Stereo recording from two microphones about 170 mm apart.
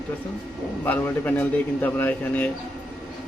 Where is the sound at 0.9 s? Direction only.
10° left (ahead or behind).